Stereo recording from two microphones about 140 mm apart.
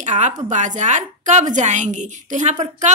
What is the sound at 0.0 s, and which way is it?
A woman's voice, 60° right (ahead or behind).